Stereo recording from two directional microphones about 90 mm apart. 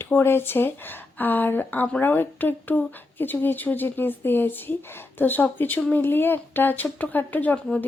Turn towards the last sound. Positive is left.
turn(degrees=20)  # may be behind; listen again after turning